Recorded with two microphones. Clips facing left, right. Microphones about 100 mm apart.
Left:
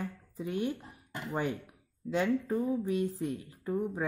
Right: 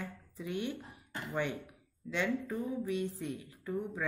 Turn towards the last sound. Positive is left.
turn(degrees=40)  # may be behind; listen again after turning